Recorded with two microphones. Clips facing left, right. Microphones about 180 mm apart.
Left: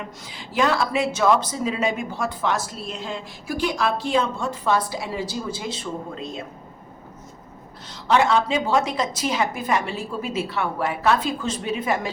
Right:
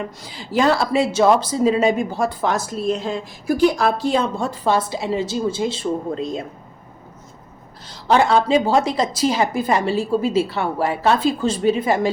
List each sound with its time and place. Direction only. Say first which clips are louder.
0.3 s speech: right 4 dB; 35° right (ahead or behind)
7.9 s speech: right 3 dB; 35° right (ahead or behind)